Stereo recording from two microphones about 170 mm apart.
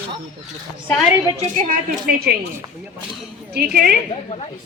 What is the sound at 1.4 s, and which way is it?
A woman's voice, 50° right (ahead or behind).